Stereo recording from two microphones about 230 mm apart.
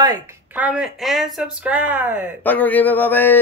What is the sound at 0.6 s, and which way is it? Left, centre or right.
Speech, centre.